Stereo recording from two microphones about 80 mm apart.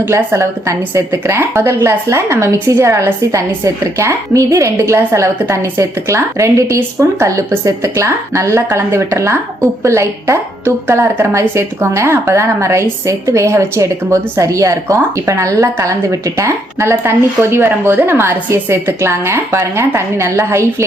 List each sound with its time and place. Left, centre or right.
0.0 s a woman's voice: right